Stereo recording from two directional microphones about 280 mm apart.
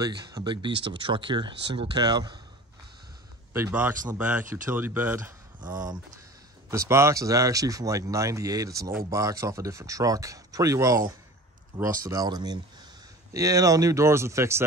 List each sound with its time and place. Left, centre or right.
0.0 s speech: centre
3.5 s speech: centre